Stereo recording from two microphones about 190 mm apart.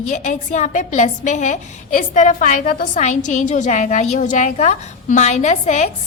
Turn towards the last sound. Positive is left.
turn(degrees=40)  # may be behind; listen again after turning